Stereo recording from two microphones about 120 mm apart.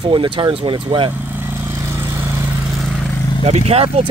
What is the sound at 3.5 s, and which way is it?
Speech, 60° right (ahead or behind).